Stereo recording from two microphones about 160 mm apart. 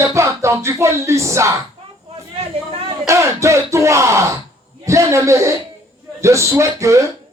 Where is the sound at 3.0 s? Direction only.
20° right (ahead or behind).